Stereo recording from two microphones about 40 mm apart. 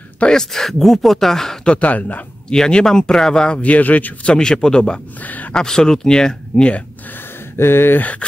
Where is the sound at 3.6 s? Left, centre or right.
Left.